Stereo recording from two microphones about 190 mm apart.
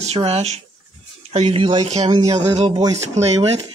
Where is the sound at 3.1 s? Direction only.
35° right (ahead or behind).